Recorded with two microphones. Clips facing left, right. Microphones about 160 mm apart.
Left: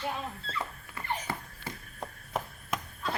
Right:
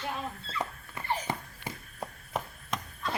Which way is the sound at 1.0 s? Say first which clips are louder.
Right 2 dB; 20° right (ahead or behind).